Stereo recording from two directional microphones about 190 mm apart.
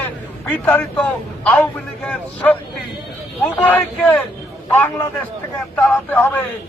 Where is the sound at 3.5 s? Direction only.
10° left (ahead or behind).